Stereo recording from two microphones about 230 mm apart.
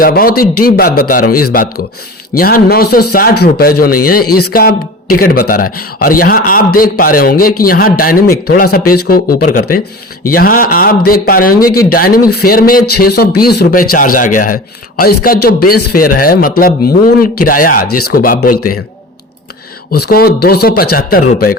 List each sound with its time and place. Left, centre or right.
0.0 s a man's voice: left
19.9 s a man's voice: left